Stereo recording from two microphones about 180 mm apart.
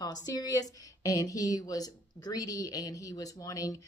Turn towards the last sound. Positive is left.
turn(degrees=20)  # may be behind; listen again after turning